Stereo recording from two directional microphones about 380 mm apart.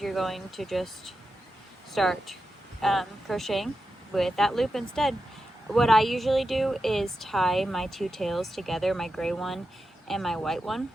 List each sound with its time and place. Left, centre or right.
0.0 s speech: centre